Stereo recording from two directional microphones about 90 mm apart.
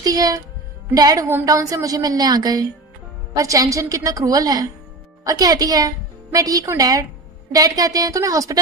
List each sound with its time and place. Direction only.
0.0 s a woman's voice: 40° right (ahead or behind)